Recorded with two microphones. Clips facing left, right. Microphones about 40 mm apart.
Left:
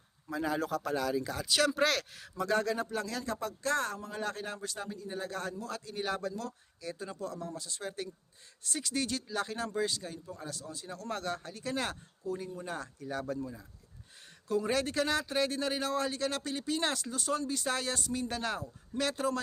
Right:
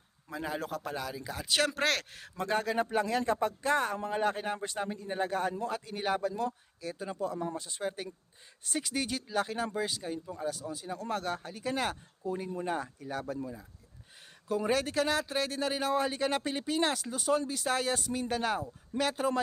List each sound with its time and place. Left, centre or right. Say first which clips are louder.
0.3 s a man's voice: left 3 dB; right
1.5 s speech: even; right
1.7 s speech: left 1 dB; right
2.7 s a man's voice: right 6 dB; right
3.9 s a man's voice: right 6 dB; right
5.3 s a man's voice: right 6 dB; centre
7.3 s a man's voice: right 5 dB; right; by 13.7 s centre
14.7 s speech: right 3 dB; centre; by 16.6 s right
16.6 s speech: right 1 dB; centre